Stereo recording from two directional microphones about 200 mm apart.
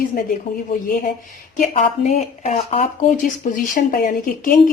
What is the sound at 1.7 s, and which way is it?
Speech, 35° left (ahead or behind).